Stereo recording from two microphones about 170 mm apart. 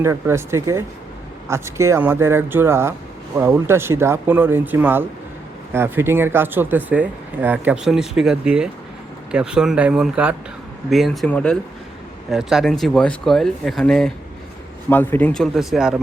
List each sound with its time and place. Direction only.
0.0 s speech: 15° right (ahead or behind)